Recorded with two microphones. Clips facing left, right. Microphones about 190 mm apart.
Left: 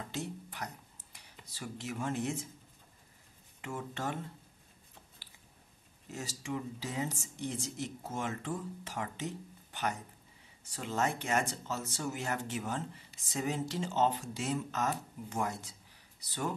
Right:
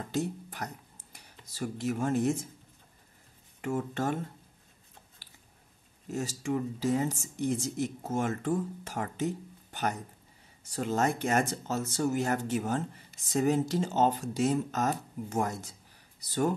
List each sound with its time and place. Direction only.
0.1 s a sound: 45° right (ahead or behind)
1.1 s speech: 45° right (ahead or behind)
3.6 s speech: 45° right (ahead or behind)
5.2 s biting: 45° right (ahead or behind)
6.1 s speech: 45° right (ahead or behind)